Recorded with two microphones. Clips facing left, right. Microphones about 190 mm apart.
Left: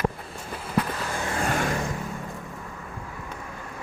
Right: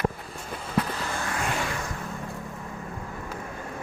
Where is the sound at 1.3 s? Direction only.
40° left (ahead or behind).